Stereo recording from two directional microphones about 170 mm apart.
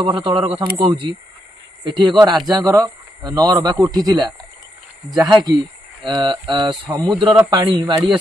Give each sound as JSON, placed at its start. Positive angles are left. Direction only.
{"t": 0.3, "sound": "a man's voice", "side_deg": -30}